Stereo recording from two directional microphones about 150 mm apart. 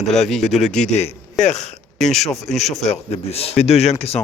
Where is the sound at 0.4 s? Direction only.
50° left (ahead or behind).